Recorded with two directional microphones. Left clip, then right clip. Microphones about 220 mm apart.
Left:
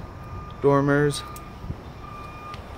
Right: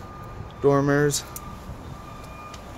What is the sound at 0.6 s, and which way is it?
Speech, 5° right (ahead or behind).